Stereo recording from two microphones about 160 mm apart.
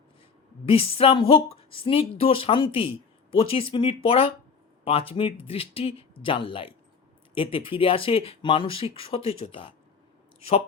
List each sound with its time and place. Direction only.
0.6 s speech: 35° left (ahead or behind)